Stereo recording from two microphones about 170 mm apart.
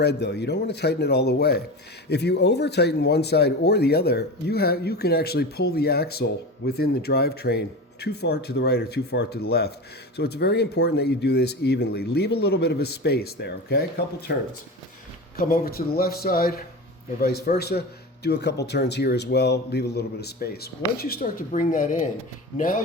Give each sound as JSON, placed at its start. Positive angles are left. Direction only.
{"t": 0.0, "sound": "speech", "side_deg": 80}
{"t": 15.4, "sound": "a man's voice", "side_deg": 60}